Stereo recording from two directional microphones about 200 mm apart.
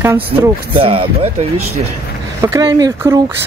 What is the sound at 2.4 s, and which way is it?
Speech, 20° right (ahead or behind).